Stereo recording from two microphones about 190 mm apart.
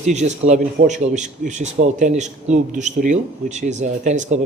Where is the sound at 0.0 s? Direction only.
35° right (ahead or behind).